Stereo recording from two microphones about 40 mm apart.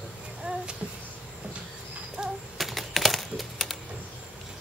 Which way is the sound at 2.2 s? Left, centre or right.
Right.